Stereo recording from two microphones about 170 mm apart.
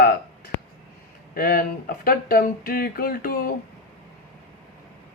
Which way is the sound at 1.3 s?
60° left (ahead or behind).